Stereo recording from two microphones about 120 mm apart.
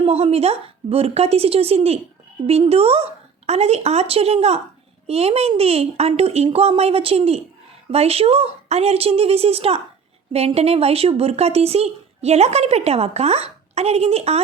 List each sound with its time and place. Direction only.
0.0 s speech: 55° right (ahead or behind)